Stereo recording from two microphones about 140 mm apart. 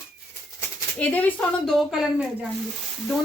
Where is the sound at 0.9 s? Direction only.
10° left (ahead or behind).